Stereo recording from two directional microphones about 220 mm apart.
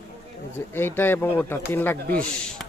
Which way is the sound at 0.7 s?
10° left (ahead or behind).